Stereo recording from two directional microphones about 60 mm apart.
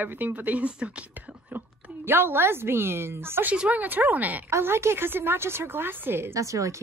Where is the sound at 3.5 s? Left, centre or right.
Right.